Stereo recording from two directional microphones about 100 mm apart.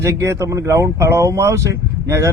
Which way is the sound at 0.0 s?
30° right (ahead or behind).